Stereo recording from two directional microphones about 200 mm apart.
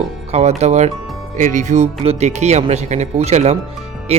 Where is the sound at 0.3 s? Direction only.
35° right (ahead or behind).